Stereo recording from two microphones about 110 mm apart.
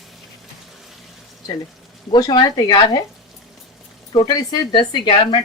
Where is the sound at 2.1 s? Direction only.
45° left (ahead or behind).